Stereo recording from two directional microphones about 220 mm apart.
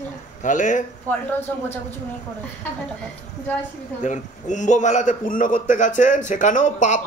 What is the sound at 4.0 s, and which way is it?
A man's voice, 35° left (ahead or behind).